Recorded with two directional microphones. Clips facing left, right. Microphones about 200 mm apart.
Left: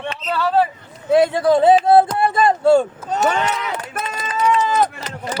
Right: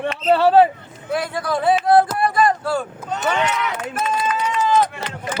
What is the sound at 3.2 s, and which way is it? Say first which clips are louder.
Speech: left 2 dB; 40° left (ahead or behind).